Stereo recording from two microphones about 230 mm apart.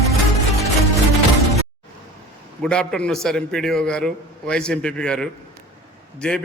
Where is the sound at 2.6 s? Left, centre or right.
Centre.